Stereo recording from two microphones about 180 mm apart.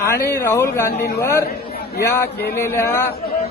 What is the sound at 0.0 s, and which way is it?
A man's voice, 15° left (ahead or behind).